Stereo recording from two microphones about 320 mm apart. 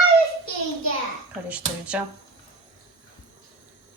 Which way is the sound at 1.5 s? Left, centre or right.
Centre.